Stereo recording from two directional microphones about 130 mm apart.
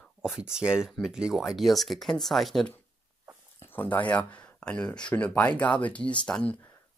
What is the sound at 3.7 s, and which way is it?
Speech, 15° left (ahead or behind).